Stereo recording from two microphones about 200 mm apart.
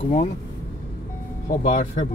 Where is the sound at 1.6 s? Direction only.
35° left (ahead or behind).